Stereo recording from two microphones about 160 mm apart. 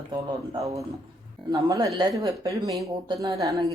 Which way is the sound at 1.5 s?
20° right (ahead or behind).